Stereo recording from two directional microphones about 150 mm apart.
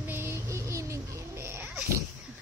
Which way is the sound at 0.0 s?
15° right (ahead or behind).